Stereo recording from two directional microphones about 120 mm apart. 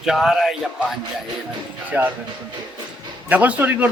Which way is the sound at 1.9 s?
15° right (ahead or behind).